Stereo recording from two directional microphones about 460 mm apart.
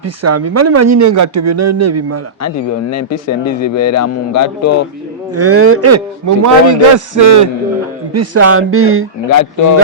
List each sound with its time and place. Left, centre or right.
0.0 s speech: right
2.9 s a man's voice: left
5.3 s speech: right
9.3 s a man's voice: left